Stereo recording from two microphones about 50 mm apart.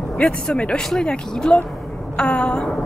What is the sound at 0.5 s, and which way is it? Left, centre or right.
Speech, left.